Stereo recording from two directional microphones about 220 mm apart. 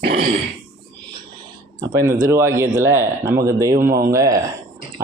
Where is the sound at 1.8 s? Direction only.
15° right (ahead or behind).